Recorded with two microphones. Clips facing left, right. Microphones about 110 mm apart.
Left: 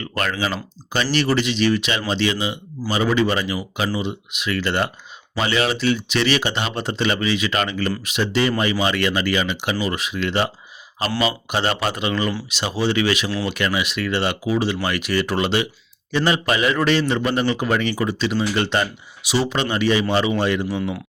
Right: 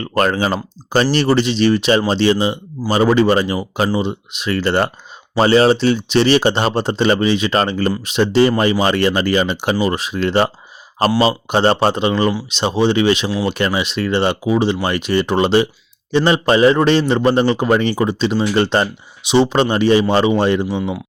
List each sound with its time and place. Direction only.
0.0 s a man's voice: 35° right (ahead or behind); by 21.0 s 20° right (ahead or behind)